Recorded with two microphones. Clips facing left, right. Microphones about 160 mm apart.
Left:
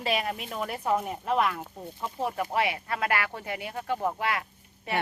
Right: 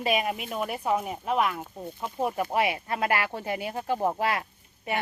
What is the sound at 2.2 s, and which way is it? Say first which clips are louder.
Speech: right 2 dB; 20° right (ahead or behind).